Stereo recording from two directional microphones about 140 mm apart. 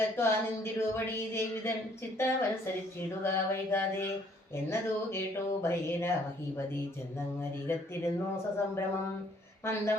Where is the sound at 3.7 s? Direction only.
20° left (ahead or behind).